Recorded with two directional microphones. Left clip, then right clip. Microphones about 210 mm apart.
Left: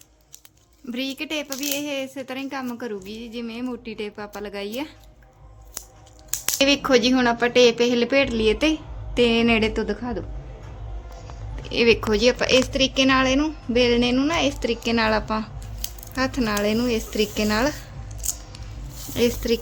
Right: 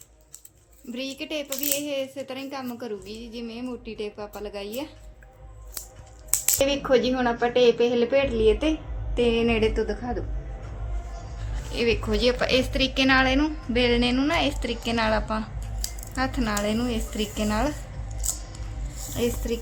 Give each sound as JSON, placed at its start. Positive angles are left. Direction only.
{"t": 0.9, "sound": "speech", "side_deg": 45}
{"t": 6.6, "sound": "speech", "side_deg": 55}
{"t": 11.7, "sound": "a woman's voice", "side_deg": 55}
{"t": 19.1, "sound": "speech", "side_deg": 45}